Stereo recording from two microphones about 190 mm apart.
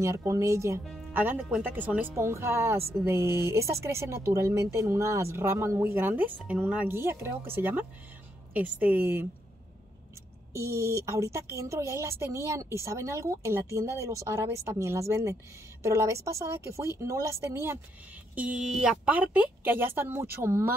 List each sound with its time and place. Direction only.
0.0 s speech: 15° right (ahead or behind)
10.5 s speech: 15° right (ahead or behind)